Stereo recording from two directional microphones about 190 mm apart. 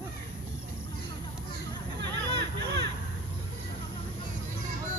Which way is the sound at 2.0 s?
65° right (ahead or behind).